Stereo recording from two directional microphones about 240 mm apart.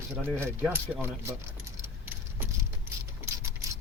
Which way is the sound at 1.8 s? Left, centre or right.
Centre.